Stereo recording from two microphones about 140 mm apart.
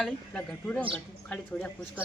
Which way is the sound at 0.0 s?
5° left (ahead or behind).